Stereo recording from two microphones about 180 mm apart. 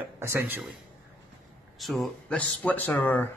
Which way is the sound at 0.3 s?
10° right (ahead or behind).